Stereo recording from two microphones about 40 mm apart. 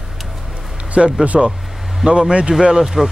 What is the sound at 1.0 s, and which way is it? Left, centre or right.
Speech, centre.